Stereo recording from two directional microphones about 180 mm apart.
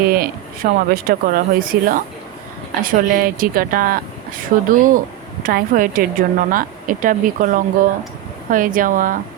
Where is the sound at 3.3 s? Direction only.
55° right (ahead or behind).